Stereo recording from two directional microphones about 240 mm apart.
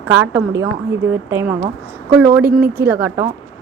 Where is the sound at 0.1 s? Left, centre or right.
Centre.